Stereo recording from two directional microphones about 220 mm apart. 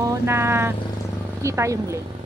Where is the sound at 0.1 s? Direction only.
10° right (ahead or behind).